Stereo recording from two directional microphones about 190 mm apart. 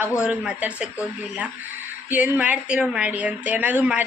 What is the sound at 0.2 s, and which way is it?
Speech, 5° right (ahead or behind).